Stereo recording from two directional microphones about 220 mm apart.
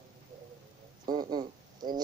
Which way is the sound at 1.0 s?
20° right (ahead or behind).